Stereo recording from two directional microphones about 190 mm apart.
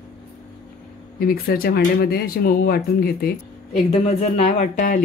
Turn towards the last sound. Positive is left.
turn(degrees=40)  # may be behind; listen again after turning